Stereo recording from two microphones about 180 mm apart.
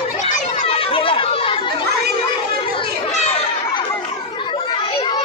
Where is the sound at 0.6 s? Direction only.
30° left (ahead or behind).